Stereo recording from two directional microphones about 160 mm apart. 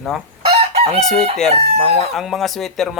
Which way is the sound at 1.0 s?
Centre (ahead or behind).